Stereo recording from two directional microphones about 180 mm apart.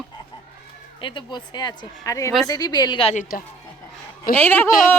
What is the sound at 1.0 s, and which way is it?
A woman's voice, 30° left (ahead or behind).